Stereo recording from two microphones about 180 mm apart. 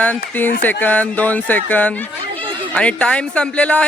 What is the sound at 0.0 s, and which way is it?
Speech, 10° left (ahead or behind).